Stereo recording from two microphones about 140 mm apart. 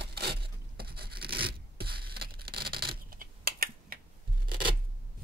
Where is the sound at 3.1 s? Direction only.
90° right.